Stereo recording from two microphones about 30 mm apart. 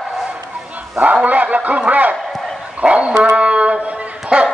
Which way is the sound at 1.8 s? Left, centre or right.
Right.